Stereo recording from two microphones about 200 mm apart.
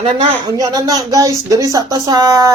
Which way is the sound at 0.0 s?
20° right (ahead or behind).